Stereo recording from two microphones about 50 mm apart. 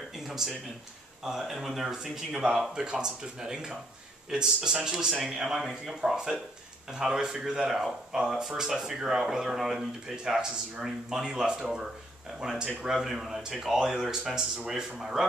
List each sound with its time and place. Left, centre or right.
1.2 s a man's voice: centre
4.8 s a man's voice: centre
5.9 s speech: centre